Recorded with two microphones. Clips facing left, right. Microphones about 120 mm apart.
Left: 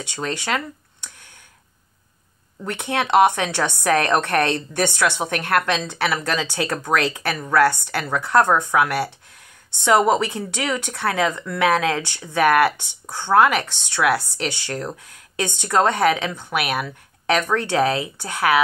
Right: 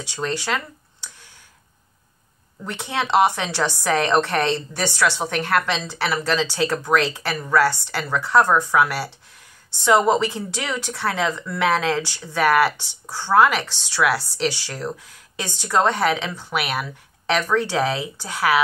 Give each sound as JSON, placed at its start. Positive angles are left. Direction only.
{"t": 0.0, "sound": "speech", "side_deg": 55}
{"t": 2.6, "sound": "speech", "side_deg": 55}